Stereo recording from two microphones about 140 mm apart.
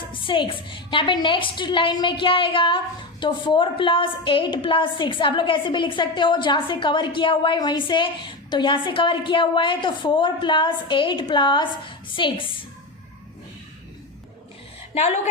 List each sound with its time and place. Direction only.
0.1 s a woman's voice: 35° left (ahead or behind)